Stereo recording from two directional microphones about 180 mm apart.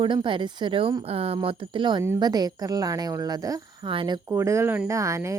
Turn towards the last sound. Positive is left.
turn(degrees=-15)  # may be behind; listen again after turning